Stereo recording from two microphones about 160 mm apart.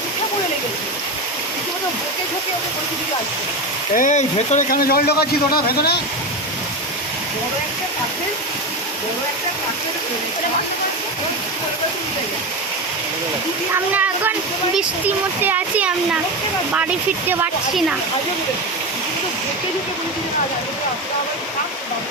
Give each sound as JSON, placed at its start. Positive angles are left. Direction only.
{"t": 3.9, "sound": "speech", "side_deg": 50}
{"t": 4.8, "sound": "a man's voice", "side_deg": 70}
{"t": 14.8, "sound": "a child's voice", "side_deg": -10}